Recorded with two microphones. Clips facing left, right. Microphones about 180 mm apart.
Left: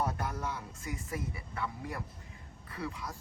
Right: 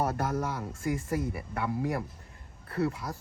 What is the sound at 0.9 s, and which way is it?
Speech, 70° right (ahead or behind).